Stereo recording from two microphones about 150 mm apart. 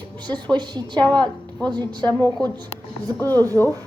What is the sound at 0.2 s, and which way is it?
A woman's voice, 30° right (ahead or behind).